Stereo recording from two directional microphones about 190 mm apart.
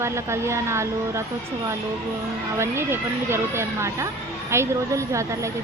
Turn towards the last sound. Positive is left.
turn(degrees=-15)  # may be behind; listen again after turning